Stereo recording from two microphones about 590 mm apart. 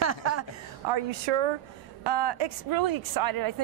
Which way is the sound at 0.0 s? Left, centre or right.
Right.